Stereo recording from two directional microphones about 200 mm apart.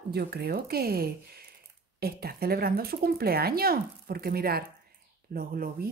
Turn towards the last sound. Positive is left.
turn(degrees=-45)  # may be behind; listen again after turning